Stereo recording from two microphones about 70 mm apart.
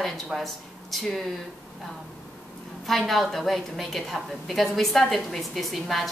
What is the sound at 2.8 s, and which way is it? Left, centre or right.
A woman's voice, centre.